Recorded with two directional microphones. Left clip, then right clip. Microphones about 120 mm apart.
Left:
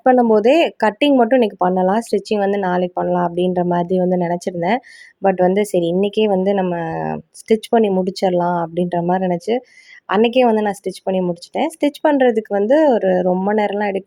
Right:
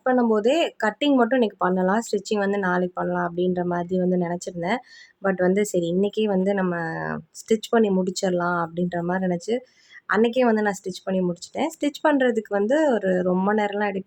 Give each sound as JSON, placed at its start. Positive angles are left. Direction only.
{"t": 0.0, "sound": "a woman's voice", "side_deg": 45}